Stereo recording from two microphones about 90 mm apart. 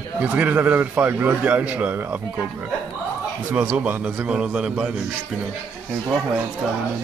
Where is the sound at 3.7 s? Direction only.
20° right (ahead or behind).